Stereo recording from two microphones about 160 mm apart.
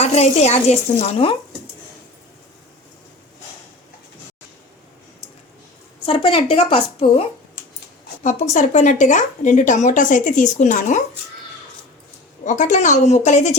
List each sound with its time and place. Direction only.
0.0 s speech: 45° left (ahead or behind)
0.9 s a woman's voice: 30° left (ahead or behind)
6.1 s a woman's voice: 35° left (ahead or behind)
8.2 s speech: 50° left (ahead or behind)
12.5 s speech: 50° left (ahead or behind)